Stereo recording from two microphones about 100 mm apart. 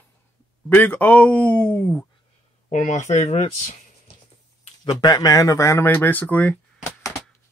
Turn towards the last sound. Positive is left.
turn(degrees=15)  # may be behind; listen again after turning